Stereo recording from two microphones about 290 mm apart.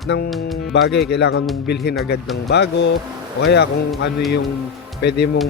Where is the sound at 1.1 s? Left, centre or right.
Left.